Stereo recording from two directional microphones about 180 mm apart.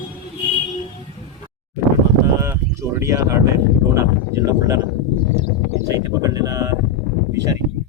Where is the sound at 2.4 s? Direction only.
15° right (ahead or behind).